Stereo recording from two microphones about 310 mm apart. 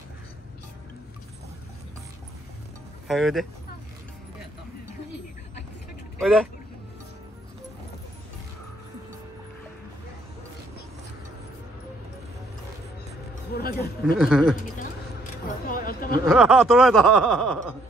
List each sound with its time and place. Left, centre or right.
3.1 s snicker: centre
6.1 s speech: centre
13.6 s a sound: left
14.1 s snicker: centre
15.4 s single-lens reflex camera: left
16.3 s snicker: centre